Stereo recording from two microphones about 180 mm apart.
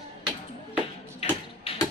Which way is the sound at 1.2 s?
35° left (ahead or behind).